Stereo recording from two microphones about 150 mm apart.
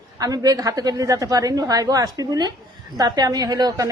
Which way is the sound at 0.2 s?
25° right (ahead or behind).